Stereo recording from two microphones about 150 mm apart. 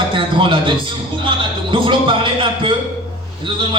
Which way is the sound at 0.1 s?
35° right (ahead or behind).